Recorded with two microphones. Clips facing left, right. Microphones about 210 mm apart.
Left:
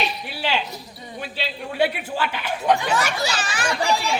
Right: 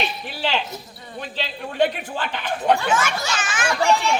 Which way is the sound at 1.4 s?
10° left (ahead or behind).